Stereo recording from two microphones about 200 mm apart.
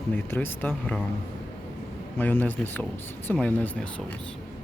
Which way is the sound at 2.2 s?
10° left (ahead or behind).